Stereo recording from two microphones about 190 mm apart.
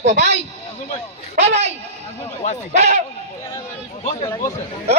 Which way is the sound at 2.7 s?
40° right (ahead or behind).